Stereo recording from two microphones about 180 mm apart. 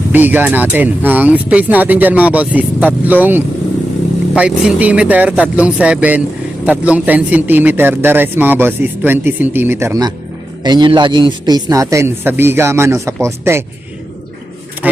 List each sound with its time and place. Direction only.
0.1 s a man's voice: 10° right (ahead or behind)